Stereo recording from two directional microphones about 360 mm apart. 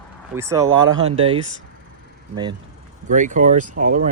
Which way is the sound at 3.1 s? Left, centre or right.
Right.